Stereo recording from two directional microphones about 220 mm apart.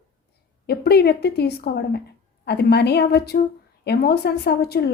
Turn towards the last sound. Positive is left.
turn(degrees=45)  # may be behind; listen again after turning